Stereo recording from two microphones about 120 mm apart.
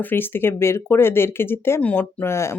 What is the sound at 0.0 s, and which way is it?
Speech, 15° left (ahead or behind).